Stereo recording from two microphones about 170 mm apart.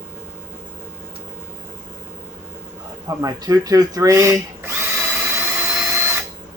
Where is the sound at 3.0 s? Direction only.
20° right (ahead or behind).